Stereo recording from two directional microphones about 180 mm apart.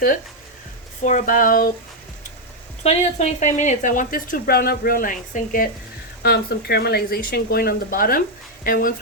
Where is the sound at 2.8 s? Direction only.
40° left (ahead or behind).